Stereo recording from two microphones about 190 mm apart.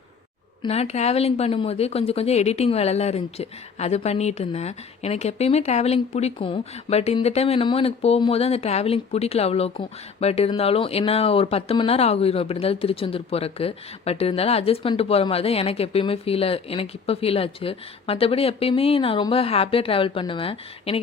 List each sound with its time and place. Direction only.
0.6 s speech: 35° left (ahead or behind)